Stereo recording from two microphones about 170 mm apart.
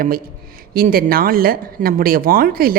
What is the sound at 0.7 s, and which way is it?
A woman's voice, 60° right (ahead or behind).